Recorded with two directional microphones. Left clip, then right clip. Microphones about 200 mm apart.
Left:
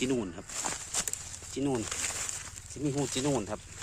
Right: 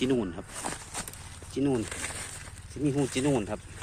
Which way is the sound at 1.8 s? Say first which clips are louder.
Left 1 dB; 30° left (ahead or behind).